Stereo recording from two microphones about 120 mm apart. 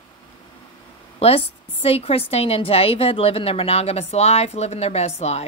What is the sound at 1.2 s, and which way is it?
A woman's voice, 55° left (ahead or behind).